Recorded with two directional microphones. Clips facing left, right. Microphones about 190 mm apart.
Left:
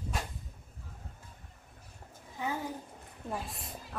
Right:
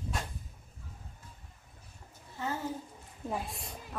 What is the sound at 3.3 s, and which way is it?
Speech, centre (ahead or behind).